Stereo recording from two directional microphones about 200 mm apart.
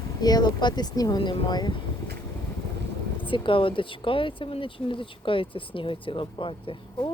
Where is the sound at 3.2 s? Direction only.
25° left (ahead or behind).